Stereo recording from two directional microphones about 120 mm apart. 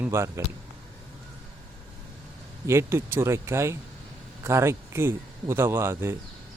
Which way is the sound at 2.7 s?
20° right (ahead or behind).